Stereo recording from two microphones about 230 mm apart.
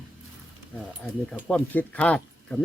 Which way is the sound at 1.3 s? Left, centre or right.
Centre.